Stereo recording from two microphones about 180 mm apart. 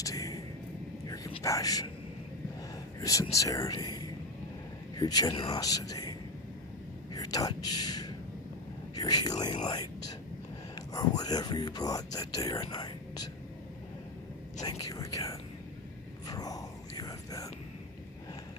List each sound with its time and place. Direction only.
0.0 s a sound: 20° left (ahead or behind)
1.0 s whispering: 20° left (ahead or behind)
3.0 s speech: 20° left (ahead or behind)
7.1 s whispering: 20° left (ahead or behind)
9.0 s speech: 20° left (ahead or behind)
10.9 s speech: 20° left (ahead or behind)
12.7 s whispering: 20° left (ahead or behind)
14.6 s speech: 20° left (ahead or behind)
16.2 s whispering: 20° left (ahead or behind)